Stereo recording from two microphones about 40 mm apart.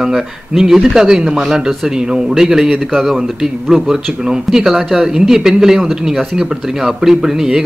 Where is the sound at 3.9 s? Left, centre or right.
Centre.